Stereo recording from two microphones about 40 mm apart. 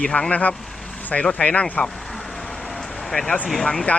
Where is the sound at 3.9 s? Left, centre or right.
Left.